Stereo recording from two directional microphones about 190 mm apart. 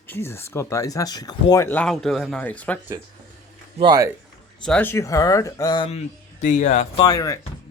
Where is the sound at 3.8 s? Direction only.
20° right (ahead or behind).